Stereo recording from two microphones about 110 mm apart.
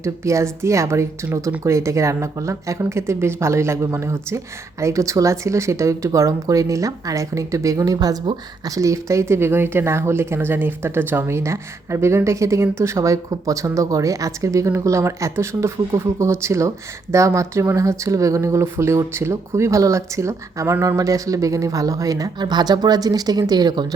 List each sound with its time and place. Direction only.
0.0 s speech: 25° right (ahead or behind)